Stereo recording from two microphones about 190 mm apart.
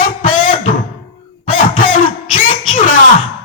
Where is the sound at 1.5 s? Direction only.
45° left (ahead or behind).